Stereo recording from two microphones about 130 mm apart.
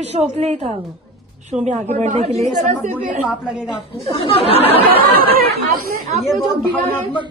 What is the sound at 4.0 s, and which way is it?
Speech, 50° left (ahead or behind).